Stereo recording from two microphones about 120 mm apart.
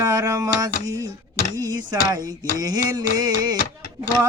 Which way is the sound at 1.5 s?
35° right (ahead or behind).